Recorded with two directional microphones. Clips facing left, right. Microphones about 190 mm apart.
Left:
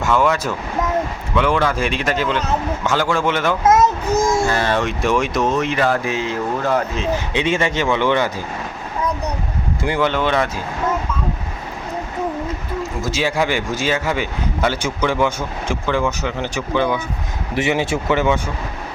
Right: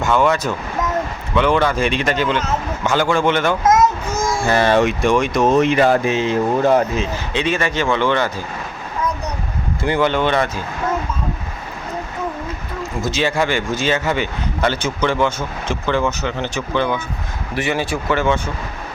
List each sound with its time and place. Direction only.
0.0 s a man's voice: 5° left (ahead or behind)
4.4 s speech: 20° right (ahead or behind)
5.0 s speech: 5° left (ahead or behind)
5.5 s speech: 15° right (ahead or behind)
7.3 s a man's voice: 20° left (ahead or behind)
9.8 s speech: 5° left (ahead or behind)
13.1 s a man's voice: 10° left (ahead or behind)